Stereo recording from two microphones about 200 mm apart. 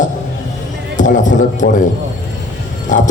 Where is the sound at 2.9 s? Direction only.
40° left (ahead or behind).